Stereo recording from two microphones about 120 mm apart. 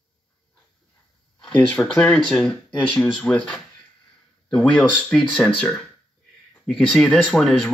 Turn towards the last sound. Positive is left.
turn(degrees=5)  # may be behind; listen again after turning